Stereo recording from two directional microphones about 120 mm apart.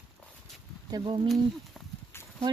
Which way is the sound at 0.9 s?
40° right (ahead or behind).